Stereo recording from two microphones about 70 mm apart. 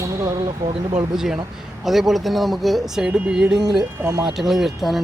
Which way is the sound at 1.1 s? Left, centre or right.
Centre.